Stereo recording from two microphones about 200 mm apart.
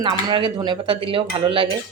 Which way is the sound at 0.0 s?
20° right (ahead or behind).